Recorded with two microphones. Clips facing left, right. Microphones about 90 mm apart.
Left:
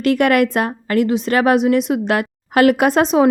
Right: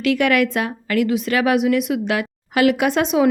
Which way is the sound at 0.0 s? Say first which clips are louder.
Left 3 dB; 45° left (ahead or behind).